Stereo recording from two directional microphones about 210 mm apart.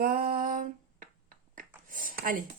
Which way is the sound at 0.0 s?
45° right (ahead or behind).